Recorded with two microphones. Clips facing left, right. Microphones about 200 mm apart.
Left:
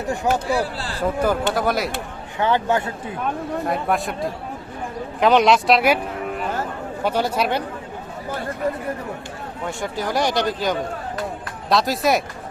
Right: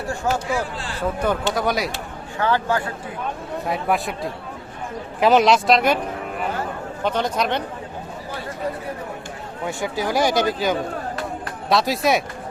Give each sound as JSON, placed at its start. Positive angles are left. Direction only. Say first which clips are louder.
{"t": 0.4, "sound": "speech", "louder": "left 2 dB", "side_deg": 35}
{"t": 0.9, "sound": "speech", "louder": "left 2 dB", "side_deg": 5}
{"t": 2.4, "sound": "speech", "louder": "left 1 dB", "side_deg": 20}
{"t": 3.7, "sound": "speech", "louder": "right 2 dB", "side_deg": 0}
{"t": 7.0, "sound": "speech", "louder": "left 1 dB", "side_deg": 10}
{"t": 9.6, "sound": "speech", "louder": "right 2 dB", "side_deg": -5}